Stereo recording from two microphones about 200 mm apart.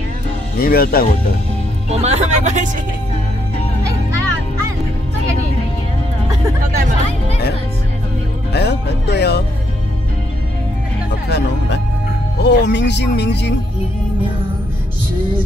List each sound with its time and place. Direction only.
0.6 s speech: 50° left (ahead or behind)
1.9 s speech: 30° right (ahead or behind)
8.5 s music: 55° left (ahead or behind)
11.2 s speech: 55° left (ahead or behind)